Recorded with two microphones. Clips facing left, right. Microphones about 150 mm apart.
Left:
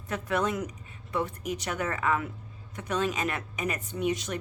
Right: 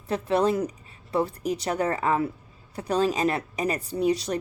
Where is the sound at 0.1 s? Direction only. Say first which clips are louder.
Right 6 dB; 30° right (ahead or behind).